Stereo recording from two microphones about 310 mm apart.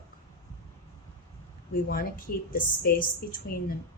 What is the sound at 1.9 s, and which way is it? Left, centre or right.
A woman's voice, left.